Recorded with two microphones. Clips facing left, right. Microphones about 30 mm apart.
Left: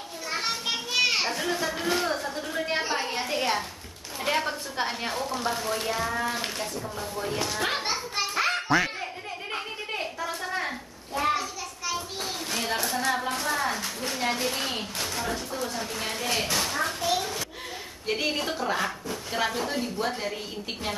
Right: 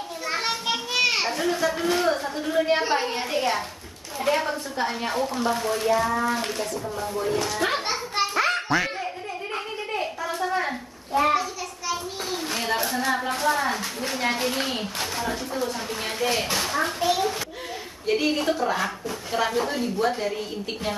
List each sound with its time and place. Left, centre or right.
0.4 s children playing: centre
5.0 s a woman's voice: centre
7.2 s children playing: centre
10.2 s a sound: centre
15.0 s speech: centre
18.0 s a woman's voice: centre